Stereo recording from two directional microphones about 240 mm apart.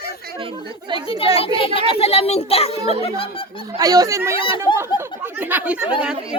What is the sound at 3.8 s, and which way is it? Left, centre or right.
Speech, centre.